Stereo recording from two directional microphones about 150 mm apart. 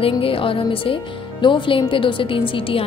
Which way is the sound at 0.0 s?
35° left (ahead or behind).